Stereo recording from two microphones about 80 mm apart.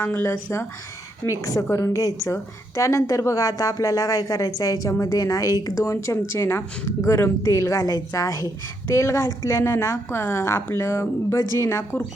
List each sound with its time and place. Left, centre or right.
0.0 s speech: left
1.2 s a woman's voice: left